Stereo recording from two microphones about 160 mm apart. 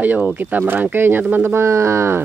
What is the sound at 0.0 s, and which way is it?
Speech, 10° right (ahead or behind).